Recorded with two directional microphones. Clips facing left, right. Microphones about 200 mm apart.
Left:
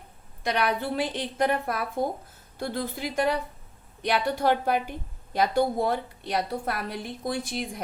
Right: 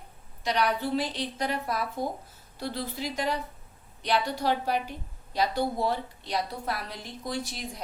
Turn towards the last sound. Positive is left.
turn(degrees=55)  # may be behind; listen again after turning